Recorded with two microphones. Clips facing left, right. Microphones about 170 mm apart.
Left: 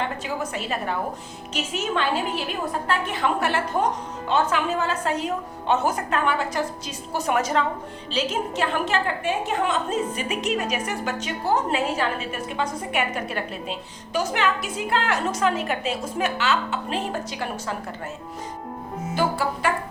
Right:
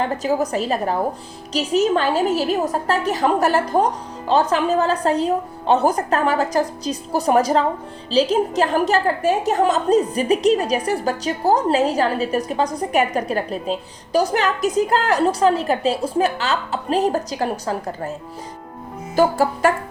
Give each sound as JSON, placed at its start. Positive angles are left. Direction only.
{"t": 0.0, "sound": "a woman's voice", "side_deg": -40}
{"t": 19.1, "sound": "speech", "side_deg": -45}